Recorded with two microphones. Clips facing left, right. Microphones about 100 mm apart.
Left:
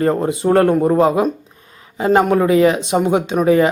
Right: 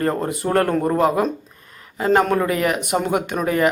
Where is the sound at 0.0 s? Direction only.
15° left (ahead or behind).